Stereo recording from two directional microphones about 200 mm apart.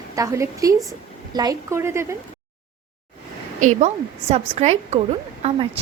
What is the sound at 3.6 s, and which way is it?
A woman's voice, 35° right (ahead or behind).